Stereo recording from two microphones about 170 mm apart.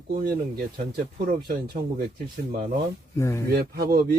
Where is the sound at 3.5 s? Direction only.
65° right (ahead or behind).